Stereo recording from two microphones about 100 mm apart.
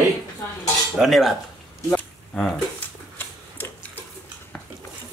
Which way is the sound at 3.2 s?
20° left (ahead or behind).